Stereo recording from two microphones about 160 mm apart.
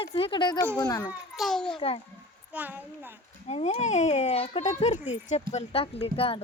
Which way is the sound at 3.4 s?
40° left (ahead or behind).